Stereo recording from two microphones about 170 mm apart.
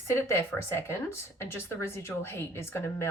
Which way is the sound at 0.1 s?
15° left (ahead or behind).